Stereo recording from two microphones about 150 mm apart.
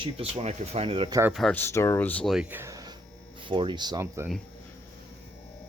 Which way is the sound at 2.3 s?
10° right (ahead or behind).